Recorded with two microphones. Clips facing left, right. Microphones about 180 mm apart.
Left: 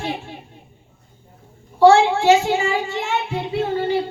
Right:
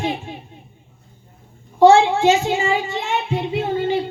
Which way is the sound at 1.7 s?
20° right (ahead or behind).